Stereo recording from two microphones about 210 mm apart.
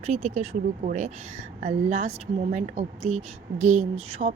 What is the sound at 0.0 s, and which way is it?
Speech, 30° right (ahead or behind).